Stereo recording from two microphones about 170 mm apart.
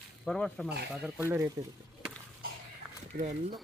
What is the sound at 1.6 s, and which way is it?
Speech, 20° right (ahead or behind).